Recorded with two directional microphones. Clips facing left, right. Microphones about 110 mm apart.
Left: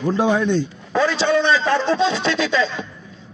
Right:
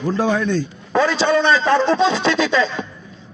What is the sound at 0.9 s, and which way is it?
A man's voice, 50° right (ahead or behind).